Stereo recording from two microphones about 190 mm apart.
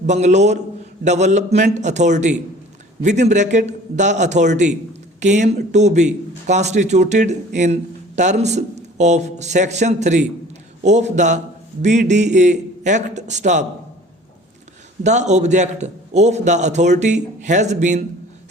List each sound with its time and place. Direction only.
0.1 s speech: 35° right (ahead or behind)
15.0 s speech: 40° right (ahead or behind)